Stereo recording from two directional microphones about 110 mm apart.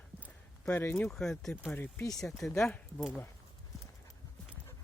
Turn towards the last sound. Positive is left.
turn(degrees=5)  # may be behind; listen again after turning